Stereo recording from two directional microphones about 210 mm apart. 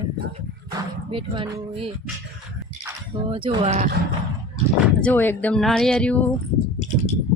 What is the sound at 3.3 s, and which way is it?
Music, 25° right (ahead or behind).